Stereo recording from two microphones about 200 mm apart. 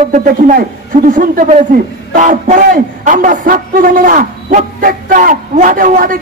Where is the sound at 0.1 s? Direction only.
40° right (ahead or behind).